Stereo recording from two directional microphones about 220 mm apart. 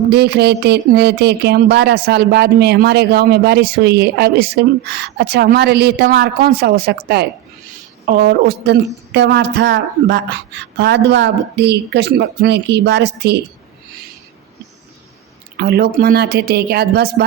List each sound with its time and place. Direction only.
0.1 s speech: 50° right (ahead or behind)
15.5 s speech: 45° right (ahead or behind)